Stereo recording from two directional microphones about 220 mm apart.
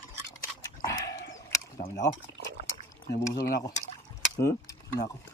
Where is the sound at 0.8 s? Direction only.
15° left (ahead or behind).